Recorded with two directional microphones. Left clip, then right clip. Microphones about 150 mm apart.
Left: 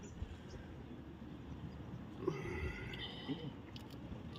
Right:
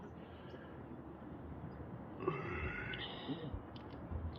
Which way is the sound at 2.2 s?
15° left (ahead or behind).